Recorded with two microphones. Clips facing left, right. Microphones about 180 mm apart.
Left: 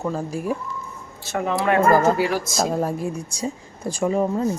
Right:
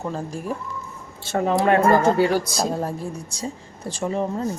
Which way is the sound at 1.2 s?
30° right (ahead or behind).